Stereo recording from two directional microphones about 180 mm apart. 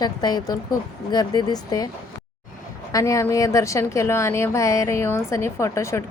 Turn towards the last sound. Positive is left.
turn(degrees=15)  # may be behind; listen again after turning